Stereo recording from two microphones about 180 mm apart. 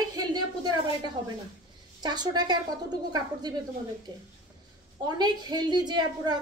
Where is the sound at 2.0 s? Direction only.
25° right (ahead or behind).